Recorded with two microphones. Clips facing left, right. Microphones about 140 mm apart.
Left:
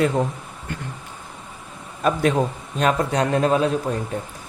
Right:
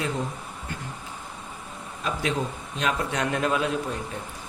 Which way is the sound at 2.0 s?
50° left (ahead or behind).